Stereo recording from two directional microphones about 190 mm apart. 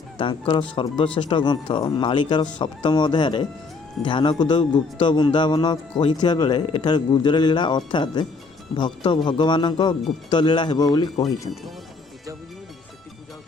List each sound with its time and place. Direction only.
0.2 s speech: 25° left (ahead or behind)